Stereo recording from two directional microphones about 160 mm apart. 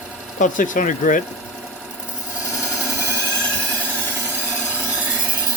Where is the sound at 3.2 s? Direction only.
10° left (ahead or behind).